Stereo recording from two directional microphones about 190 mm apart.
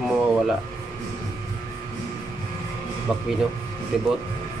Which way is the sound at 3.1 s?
5° right (ahead or behind).